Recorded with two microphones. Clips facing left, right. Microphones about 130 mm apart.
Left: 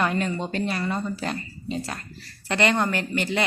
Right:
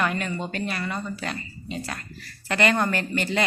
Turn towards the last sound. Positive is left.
turn(degrees=15)  # may be behind; listen again after turning